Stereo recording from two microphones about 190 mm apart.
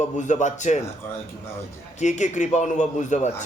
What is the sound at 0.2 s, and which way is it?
Speech, 40° left (ahead or behind).